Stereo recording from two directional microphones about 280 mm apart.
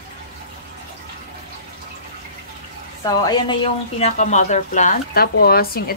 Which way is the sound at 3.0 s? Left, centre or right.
Centre.